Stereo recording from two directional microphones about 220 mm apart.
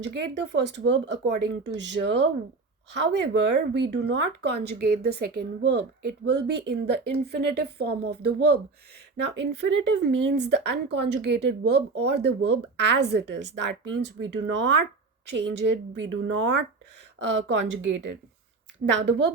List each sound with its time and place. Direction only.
0.0 s a woman's voice: 50° right (ahead or behind)